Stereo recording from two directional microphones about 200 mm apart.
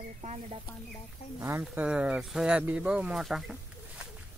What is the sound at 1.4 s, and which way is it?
Speech, 5° right (ahead or behind).